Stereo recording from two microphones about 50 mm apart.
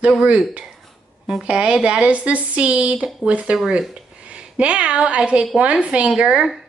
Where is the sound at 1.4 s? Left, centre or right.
Right.